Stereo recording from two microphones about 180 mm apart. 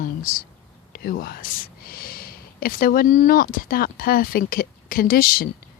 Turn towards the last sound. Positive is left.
turn(degrees=55)  # may be behind; listen again after turning